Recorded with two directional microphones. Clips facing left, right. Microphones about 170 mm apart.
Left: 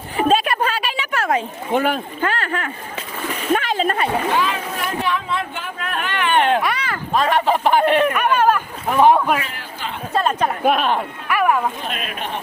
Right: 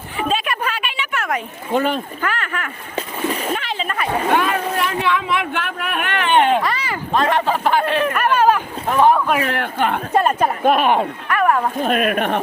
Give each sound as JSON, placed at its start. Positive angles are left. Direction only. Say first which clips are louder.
{"t": 0.2, "sound": "a sound", "louder": "left 4 dB", "side_deg": 40}
{"t": 1.7, "sound": "speech", "louder": "even", "side_deg": 10}
{"t": 2.2, "sound": "speech", "louder": "left 6 dB", "side_deg": 30}
{"t": 3.5, "sound": "splash", "louder": "left 5 dB", "side_deg": 45}
{"t": 4.4, "sound": "speech", "louder": "right 3 dB", "side_deg": -55}
{"t": 4.9, "sound": "speech", "louder": "right 2 dB", "side_deg": -90}
{"t": 6.6, "sound": "speech", "louder": "even", "side_deg": 0}
{"t": 8.1, "sound": "a sound", "louder": "right 1 dB", "side_deg": -5}
{"t": 9.0, "sound": "speech", "louder": "left 1 dB", "side_deg": 15}
{"t": 9.5, "sound": "a woman's voice", "louder": "right 11 dB", "side_deg": -65}
{"t": 10.1, "sound": "a woman's voice", "louder": "left 1 dB", "side_deg": -10}
{"t": 11.3, "sound": "speech", "louder": "even", "side_deg": 5}
{"t": 11.8, "sound": "a woman's voice", "louder": "right 10 dB", "side_deg": -50}